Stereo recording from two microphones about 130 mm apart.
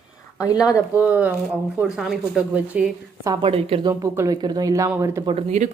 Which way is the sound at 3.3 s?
45° right (ahead or behind).